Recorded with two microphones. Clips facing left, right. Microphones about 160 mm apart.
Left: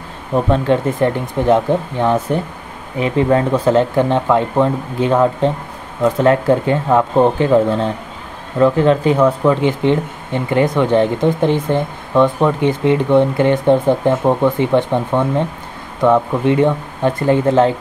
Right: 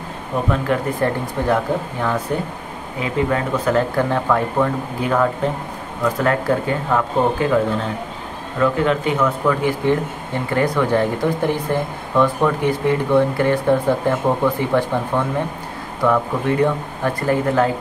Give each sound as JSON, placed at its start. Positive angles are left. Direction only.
{"t": 0.5, "sound": "speech", "side_deg": 25}